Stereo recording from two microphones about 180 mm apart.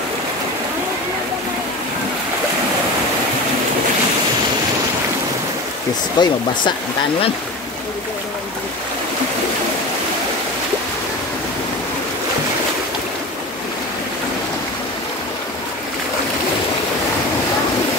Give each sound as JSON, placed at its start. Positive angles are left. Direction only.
{"t": 6.1, "sound": "speech", "side_deg": 25}